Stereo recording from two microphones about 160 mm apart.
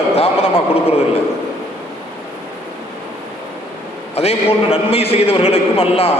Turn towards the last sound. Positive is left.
turn(degrees=35)  # may be behind; listen again after turning